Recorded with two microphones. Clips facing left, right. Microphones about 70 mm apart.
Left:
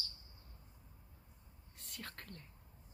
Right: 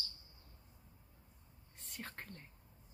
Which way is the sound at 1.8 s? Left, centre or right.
Left.